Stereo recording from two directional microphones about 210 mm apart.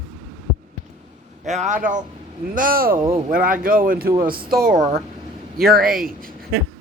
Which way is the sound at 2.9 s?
25° right (ahead or behind).